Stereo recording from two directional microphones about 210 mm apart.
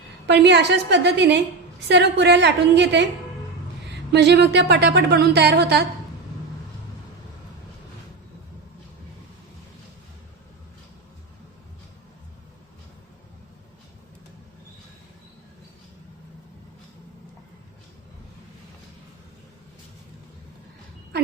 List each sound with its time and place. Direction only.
0.3 s a woman's voice: 55° right (ahead or behind)
4.1 s a woman's voice: 55° right (ahead or behind)